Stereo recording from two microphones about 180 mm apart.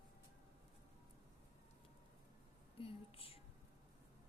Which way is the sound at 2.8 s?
30° left (ahead or behind).